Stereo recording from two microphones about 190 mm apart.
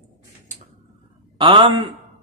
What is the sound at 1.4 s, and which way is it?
Speech, 25° right (ahead or behind).